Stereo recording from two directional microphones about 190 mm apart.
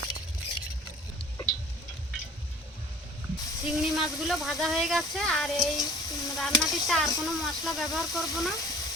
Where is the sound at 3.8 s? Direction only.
Centre (ahead or behind).